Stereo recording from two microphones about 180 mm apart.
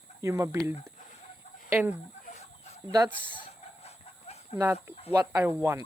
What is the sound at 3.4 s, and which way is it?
Train, 35° left (ahead or behind).